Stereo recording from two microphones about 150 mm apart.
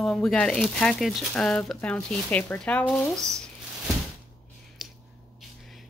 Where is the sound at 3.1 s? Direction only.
20° right (ahead or behind).